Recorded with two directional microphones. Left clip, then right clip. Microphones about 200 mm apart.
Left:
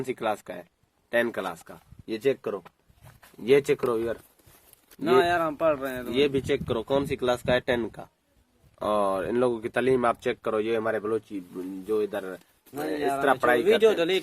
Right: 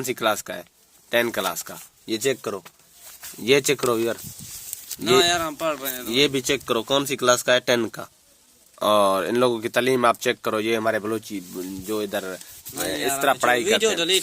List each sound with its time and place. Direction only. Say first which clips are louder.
0.0 s speech: right 6 dB; 35° right (ahead or behind)
5.0 s speech: right 3 dB; 35° left (ahead or behind)
6.1 s speech: right 4 dB; 35° right (ahead or behind)
13.2 s a man's voice: right 3 dB; 25° right (ahead or behind)
13.7 s speech: right 1 dB; 35° left (ahead or behind)